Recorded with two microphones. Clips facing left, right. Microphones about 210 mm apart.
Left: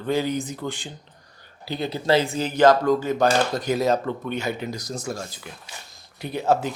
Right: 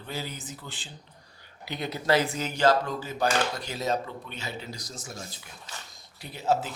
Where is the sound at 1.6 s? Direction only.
30° left (ahead or behind).